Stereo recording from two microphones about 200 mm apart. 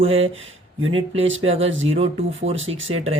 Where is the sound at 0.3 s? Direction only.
75° right (ahead or behind).